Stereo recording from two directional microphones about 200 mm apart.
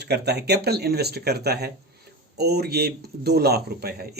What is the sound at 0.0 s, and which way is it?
Speech, 55° right (ahead or behind).